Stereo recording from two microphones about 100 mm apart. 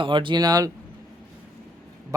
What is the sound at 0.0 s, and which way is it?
Speech, 55° right (ahead or behind).